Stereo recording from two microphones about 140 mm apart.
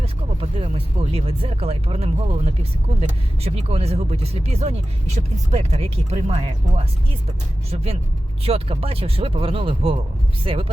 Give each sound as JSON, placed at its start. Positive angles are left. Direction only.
{"t": 0.0, "sound": "speech", "side_deg": -40}
{"t": 8.4, "sound": "speech", "side_deg": -45}